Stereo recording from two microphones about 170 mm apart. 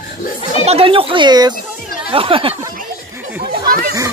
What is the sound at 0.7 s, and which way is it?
Speech, 35° right (ahead or behind).